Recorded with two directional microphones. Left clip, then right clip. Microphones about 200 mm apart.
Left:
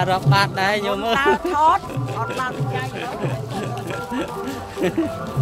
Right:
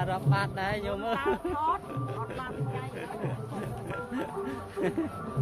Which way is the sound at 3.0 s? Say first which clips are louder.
Left 10 dB; 5° left (ahead or behind).